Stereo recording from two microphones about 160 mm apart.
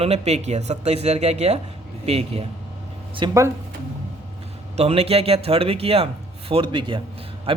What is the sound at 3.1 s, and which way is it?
Speech, 25° right (ahead or behind).